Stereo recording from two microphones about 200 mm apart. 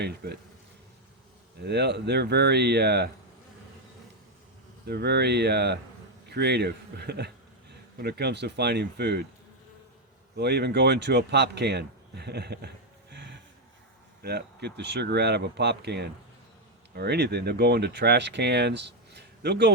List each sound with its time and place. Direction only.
1.6 s speech: 55° right (ahead or behind)
4.9 s speech: 55° right (ahead or behind)
10.3 s speech: 55° right (ahead or behind)